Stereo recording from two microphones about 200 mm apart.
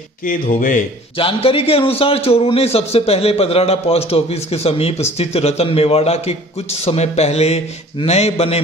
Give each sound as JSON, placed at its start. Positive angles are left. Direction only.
{"t": 0.2, "sound": "a man's voice", "side_deg": 40}
{"t": 1.1, "sound": "a man's voice", "side_deg": 25}